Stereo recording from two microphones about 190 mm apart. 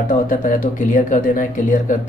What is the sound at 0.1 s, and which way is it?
Speech, 45° left (ahead or behind).